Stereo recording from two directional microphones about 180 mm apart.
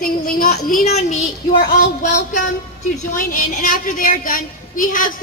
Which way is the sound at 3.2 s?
50° left (ahead or behind).